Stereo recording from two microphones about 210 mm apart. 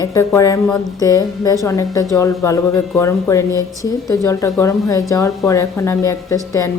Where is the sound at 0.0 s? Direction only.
15° left (ahead or behind).